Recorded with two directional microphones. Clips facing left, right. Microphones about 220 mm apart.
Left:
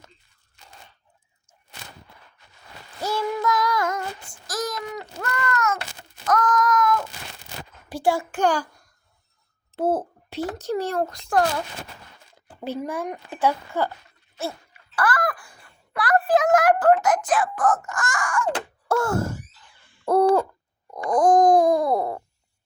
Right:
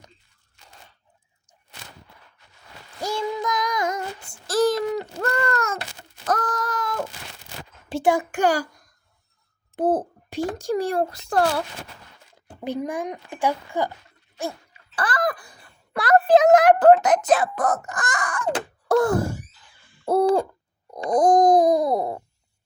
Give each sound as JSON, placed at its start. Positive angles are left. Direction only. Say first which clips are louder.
{"t": 3.0, "sound": "child singing", "louder": "left 1 dB", "side_deg": -15}
{"t": 4.4, "sound": "a sound", "louder": "right 9 dB", "side_deg": -30}
{"t": 7.9, "sound": "a child's voice", "louder": "right 2 dB", "side_deg": -20}
{"t": 9.7, "sound": "a child's voice", "louder": "right 2 dB", "side_deg": -15}
{"t": 12.6, "sound": "a child's voice", "louder": "right 1 dB", "side_deg": -15}
{"t": 14.3, "sound": "a sound", "louder": "right 1 dB", "side_deg": -15}
{"t": 17.6, "sound": "speech", "louder": "left 1 dB", "side_deg": -40}
{"t": 17.9, "sound": "wail", "louder": "left 2 dB", "side_deg": -20}
{"t": 20.1, "sound": "owl", "louder": "left 1 dB", "side_deg": -30}
{"t": 21.0, "sound": "a sound", "louder": "even", "side_deg": -20}